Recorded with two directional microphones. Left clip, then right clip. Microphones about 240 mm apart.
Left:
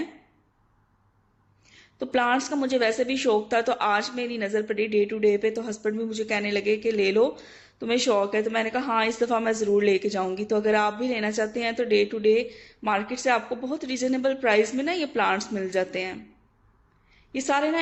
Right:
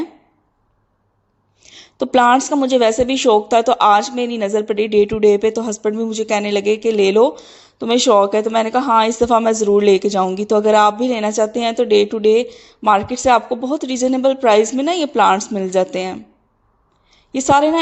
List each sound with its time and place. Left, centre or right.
1.6 s a sound: right
2.1 s a woman's voice: right
17.3 s a woman's voice: right